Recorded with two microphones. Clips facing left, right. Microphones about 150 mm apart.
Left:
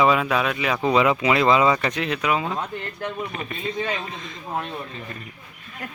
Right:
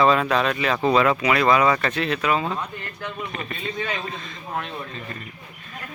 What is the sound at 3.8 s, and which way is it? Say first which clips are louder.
Speech: even; 20° left (ahead or behind).